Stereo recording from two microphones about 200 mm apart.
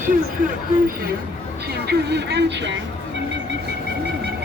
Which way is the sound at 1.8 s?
55° right (ahead or behind).